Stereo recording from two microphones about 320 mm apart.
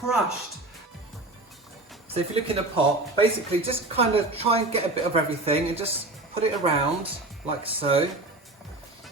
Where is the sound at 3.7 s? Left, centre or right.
Centre.